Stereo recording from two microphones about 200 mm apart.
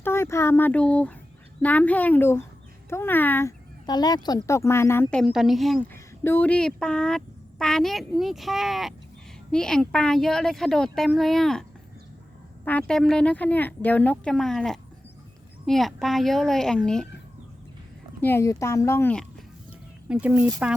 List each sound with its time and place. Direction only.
0.0 s speech: 10° left (ahead or behind)
5.9 s speech: 10° left (ahead or behind)
12.6 s speech: 5° left (ahead or behind)
18.2 s speech: 10° left (ahead or behind)
20.1 s speech: 5° right (ahead or behind)